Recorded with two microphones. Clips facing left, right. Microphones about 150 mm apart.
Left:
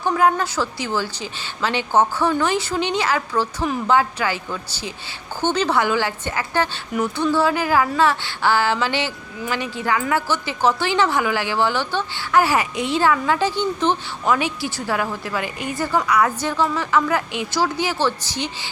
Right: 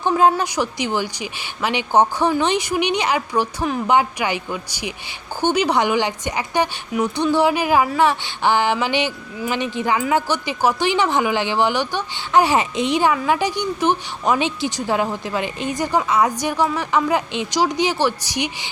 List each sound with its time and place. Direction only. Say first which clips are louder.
0.0 s a woman's voice: right 2 dB; 20° right (ahead or behind)